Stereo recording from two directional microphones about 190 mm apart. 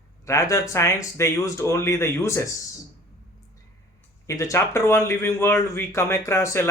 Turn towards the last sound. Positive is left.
turn(degrees=15)  # may be behind; listen again after turning